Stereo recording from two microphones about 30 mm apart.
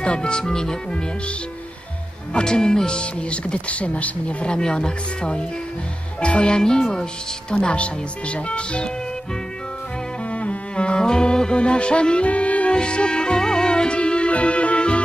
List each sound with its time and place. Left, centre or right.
0.0 s music: left
0.4 s speech: left
2.3 s speech: left
4.5 s speech: left
7.5 s speech: left
10.3 s music: left
11.1 s speech: left
12.3 s music: left
12.7 s music: left